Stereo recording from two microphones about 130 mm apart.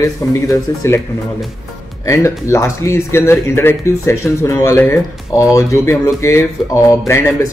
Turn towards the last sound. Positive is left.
turn(degrees=20)  # may be behind; listen again after turning